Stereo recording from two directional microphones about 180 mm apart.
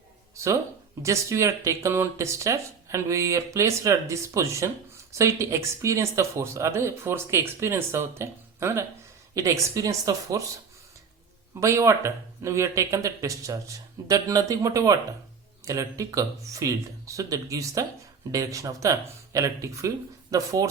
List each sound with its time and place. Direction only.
1.0 s speech: 15° right (ahead or behind)
11.6 s speech: 15° right (ahead or behind)